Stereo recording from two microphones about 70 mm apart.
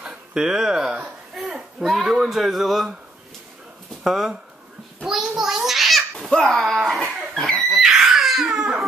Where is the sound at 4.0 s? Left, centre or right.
Centre.